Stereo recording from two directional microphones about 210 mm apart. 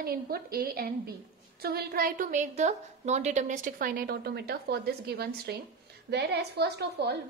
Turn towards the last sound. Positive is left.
turn(degrees=-50)  # may be behind; listen again after turning